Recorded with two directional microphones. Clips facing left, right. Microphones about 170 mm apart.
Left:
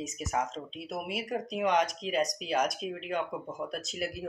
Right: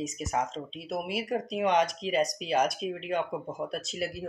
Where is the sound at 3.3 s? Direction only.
30° right (ahead or behind).